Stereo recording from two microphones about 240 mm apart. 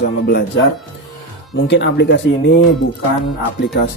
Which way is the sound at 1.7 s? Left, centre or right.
Left.